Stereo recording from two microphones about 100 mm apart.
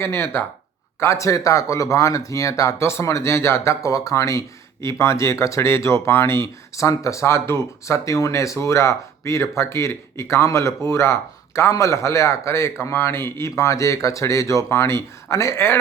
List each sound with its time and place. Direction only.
0.0 s speech: 25° left (ahead or behind)